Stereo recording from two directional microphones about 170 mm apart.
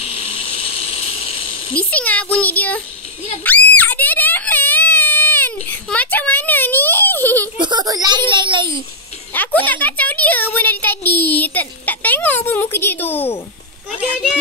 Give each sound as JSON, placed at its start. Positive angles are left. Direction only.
{"t": 0.0, "sound": "a sound", "side_deg": 35}
{"t": 1.8, "sound": "speech", "side_deg": 10}
{"t": 3.4, "sound": "screaming", "side_deg": 10}
{"t": 7.5, "sound": "a child's voice", "side_deg": -25}
{"t": 9.3, "sound": "a woman's voice", "side_deg": 10}